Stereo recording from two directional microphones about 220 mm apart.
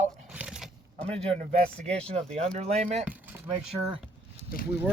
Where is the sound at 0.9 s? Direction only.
30° right (ahead or behind).